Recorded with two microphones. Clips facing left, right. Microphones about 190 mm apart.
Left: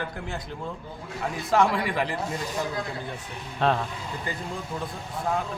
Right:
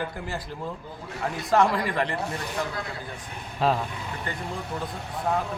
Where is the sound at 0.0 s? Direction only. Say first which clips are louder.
Right 1 dB; 5° right (ahead or behind).